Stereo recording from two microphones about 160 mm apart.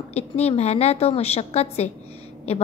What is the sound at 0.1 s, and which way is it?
A woman's voice, 40° left (ahead or behind).